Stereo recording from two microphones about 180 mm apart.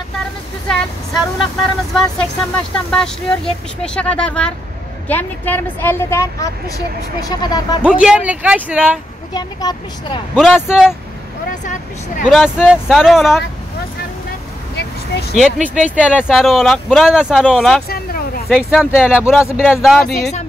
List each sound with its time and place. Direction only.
2.0 s a woman's voice: 5° left (ahead or behind); by 7.8 s 20° left (ahead or behind)
7.8 s speech: 5° right (ahead or behind)
9.3 s speech: 20° left (ahead or behind)
10.3 s speech: 5° right (ahead or behind)
11.6 s speech: 45° left (ahead or behind)
12.3 s speech: centre (ahead or behind)
14.8 s vehicle: 65° left (ahead or behind)
15.3 s speech: centre (ahead or behind)
17.8 s a sound: 55° left (ahead or behind)
18.5 s speech: centre (ahead or behind)